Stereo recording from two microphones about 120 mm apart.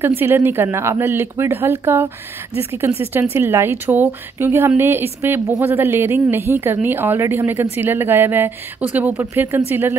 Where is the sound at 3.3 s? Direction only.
20° right (ahead or behind).